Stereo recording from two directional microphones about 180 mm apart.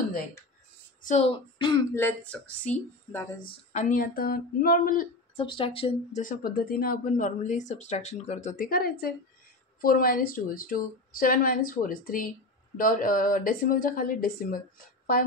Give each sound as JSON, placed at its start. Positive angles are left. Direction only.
{"t": 1.0, "sound": "speech", "side_deg": 35}
{"t": 2.0, "sound": "speech", "side_deg": 10}
{"t": 3.7, "sound": "a woman's voice", "side_deg": 45}
{"t": 5.3, "sound": "speech", "side_deg": 30}
{"t": 6.2, "sound": "a woman's voice", "side_deg": 50}